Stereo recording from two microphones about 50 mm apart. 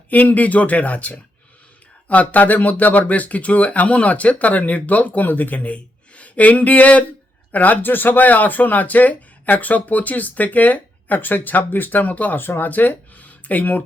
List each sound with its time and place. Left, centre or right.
0.1 s speech: left
12.4 s speech: left